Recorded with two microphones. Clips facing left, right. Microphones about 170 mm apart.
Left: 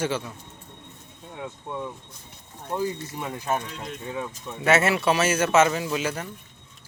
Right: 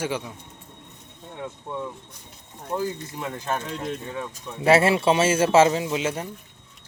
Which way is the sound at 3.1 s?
10° left (ahead or behind).